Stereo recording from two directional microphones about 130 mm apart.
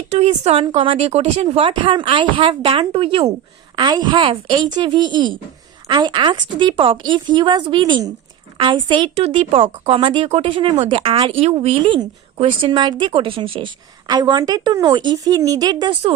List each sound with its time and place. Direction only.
0.1 s a woman's voice: 60° right (ahead or behind); by 9.0 s 40° right (ahead or behind)
9.1 s a woman's voice: 50° right (ahead or behind); by 16.0 s 30° right (ahead or behind)